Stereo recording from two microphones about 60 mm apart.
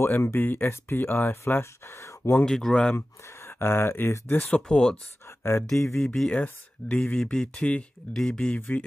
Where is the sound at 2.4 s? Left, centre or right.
Centre.